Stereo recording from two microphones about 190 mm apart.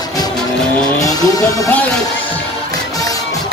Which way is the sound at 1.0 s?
20° left (ahead or behind).